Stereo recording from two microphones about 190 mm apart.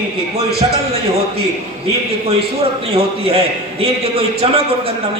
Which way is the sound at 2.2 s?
30° right (ahead or behind).